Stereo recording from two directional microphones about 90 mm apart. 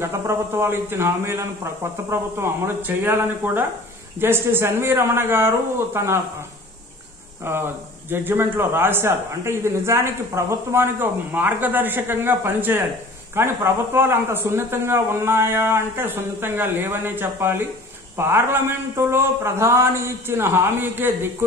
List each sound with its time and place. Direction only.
0.0 s a man's voice: 30° right (ahead or behind)
7.4 s a man's voice: 25° right (ahead or behind)